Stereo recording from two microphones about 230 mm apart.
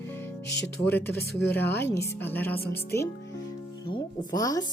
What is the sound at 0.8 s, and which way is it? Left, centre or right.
Speech, centre.